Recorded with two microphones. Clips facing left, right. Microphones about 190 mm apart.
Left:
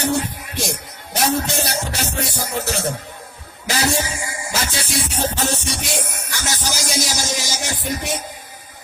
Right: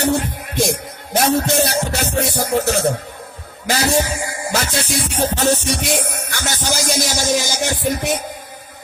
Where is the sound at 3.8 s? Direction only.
45° right (ahead or behind).